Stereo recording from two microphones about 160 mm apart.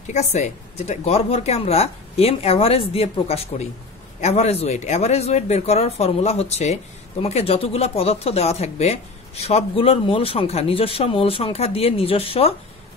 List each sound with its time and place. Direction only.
0.1 s speech: 45° left (ahead or behind)